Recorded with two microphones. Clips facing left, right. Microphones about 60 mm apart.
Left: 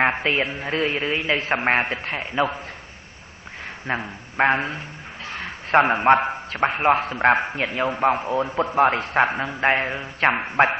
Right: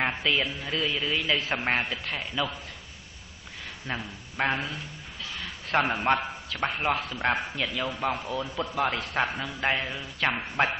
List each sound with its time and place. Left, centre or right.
0.0 s a man's voice: left
3.8 s a man's voice: left